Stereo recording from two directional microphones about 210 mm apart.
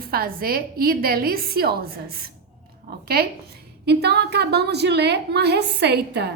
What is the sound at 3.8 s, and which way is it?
A woman's voice, 50° right (ahead or behind).